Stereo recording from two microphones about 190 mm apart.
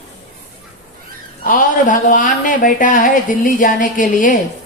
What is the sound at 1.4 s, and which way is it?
Speech, 45° left (ahead or behind).